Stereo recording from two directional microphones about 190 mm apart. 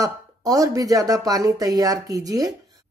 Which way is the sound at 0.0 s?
20° right (ahead or behind).